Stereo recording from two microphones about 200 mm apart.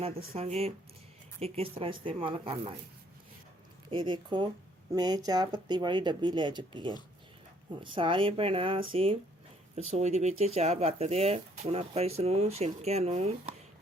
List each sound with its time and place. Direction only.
0.3 s speech: 30° right (ahead or behind)
3.8 s speech: 25° right (ahead or behind)
7.9 s speech: 25° right (ahead or behind)